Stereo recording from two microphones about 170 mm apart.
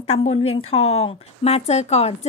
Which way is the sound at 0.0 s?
35° left (ahead or behind).